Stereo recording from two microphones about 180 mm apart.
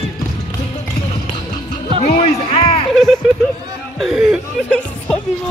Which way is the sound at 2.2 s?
30° left (ahead or behind).